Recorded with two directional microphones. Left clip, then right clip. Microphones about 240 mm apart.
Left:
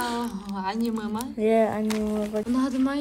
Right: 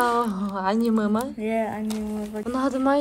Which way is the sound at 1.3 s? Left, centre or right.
Left.